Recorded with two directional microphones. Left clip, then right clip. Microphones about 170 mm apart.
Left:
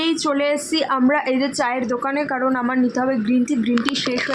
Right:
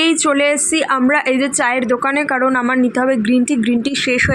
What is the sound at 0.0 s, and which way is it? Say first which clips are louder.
A woman's voice: right 6 dB; 25° right (ahead or behind).